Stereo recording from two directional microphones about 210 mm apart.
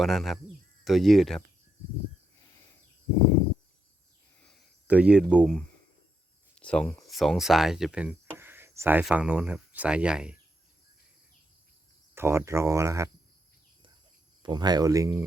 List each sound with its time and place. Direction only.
0.0 s speech: centre (ahead or behind)
4.9 s speech: 5° right (ahead or behind)
6.6 s speech: 5° left (ahead or behind)
12.1 s speech: 10° right (ahead or behind)
14.4 s speech: 20° right (ahead or behind)